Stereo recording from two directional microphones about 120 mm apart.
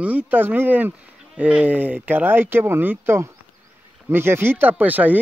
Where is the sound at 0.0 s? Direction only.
15° right (ahead or behind).